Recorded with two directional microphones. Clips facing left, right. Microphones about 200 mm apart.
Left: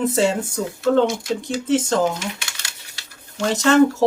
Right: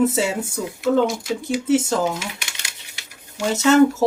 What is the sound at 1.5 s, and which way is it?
Speech, 5° right (ahead or behind).